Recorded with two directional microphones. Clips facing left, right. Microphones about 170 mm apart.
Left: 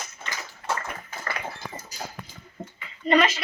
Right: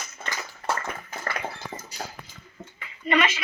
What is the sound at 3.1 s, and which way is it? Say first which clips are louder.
Speech: left 3 dB; 35° left (ahead or behind).